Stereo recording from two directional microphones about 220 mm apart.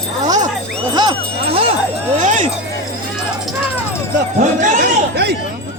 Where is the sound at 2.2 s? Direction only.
35° right (ahead or behind).